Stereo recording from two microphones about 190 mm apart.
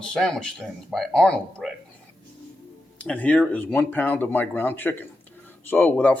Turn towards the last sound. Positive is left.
turn(degrees=10)  # may be behind; listen again after turning